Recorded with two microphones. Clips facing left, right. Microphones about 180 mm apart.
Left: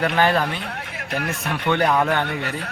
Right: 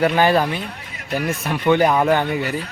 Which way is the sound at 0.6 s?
70° left (ahead or behind).